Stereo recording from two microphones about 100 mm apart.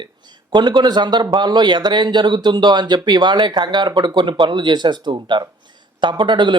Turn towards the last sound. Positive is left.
turn(degrees=-50)  # may be behind; listen again after turning